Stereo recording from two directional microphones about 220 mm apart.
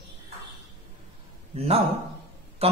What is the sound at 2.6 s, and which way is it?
Mantra, 25° right (ahead or behind).